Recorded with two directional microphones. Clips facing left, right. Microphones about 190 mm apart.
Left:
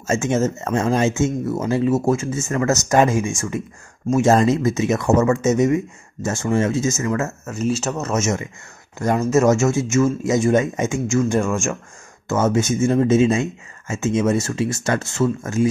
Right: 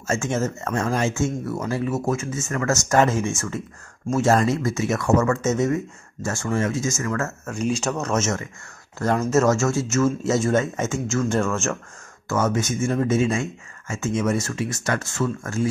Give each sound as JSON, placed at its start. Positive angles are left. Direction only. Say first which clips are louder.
{"t": 0.0, "sound": "speech", "louder": "left 5 dB", "side_deg": 20}
{"t": 7.5, "sound": "speech", "louder": "left 2 dB", "side_deg": 5}
{"t": 12.3, "sound": "speech", "louder": "left 4 dB", "side_deg": 25}